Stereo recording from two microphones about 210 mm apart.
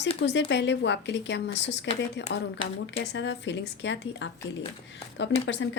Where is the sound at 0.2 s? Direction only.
55° left (ahead or behind).